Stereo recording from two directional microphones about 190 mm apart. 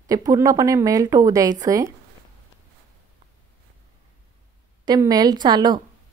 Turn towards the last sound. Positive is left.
turn(degrees=-20)  # may be behind; listen again after turning